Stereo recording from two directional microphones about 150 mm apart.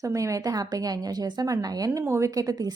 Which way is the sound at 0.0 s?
20° right (ahead or behind).